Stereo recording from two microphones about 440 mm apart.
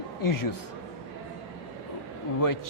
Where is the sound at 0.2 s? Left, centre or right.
Left.